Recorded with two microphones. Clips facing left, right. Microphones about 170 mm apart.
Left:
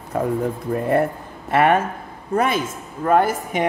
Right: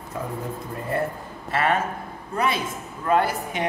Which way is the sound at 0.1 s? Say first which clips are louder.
Left 9 dB; 60° left (ahead or behind).